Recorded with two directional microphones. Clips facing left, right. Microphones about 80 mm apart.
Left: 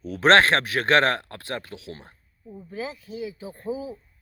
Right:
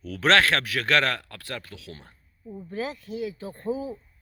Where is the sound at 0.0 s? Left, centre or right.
Left.